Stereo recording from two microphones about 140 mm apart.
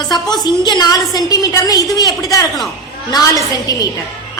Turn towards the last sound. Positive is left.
turn(degrees=25)  # may be behind; listen again after turning